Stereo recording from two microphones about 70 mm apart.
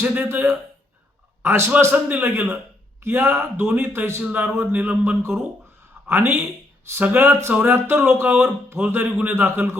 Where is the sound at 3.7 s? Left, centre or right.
Right.